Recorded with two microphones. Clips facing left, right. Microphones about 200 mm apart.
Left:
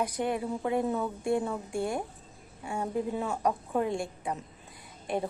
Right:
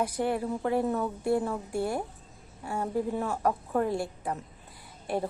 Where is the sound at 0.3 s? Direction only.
20° left (ahead or behind).